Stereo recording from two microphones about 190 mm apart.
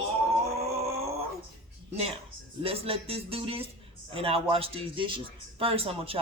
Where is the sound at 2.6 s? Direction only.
30° right (ahead or behind).